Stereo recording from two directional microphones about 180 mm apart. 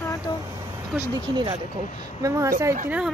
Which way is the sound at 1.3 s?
25° right (ahead or behind).